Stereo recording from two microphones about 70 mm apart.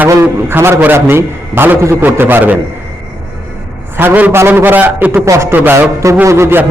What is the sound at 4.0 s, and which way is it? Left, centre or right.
A man's voice, right.